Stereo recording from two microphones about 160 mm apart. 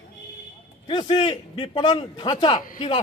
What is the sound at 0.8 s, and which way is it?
A man's voice, 30° left (ahead or behind).